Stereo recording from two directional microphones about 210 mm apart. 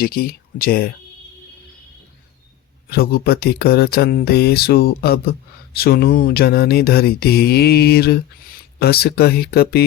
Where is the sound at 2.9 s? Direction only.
45° left (ahead or behind).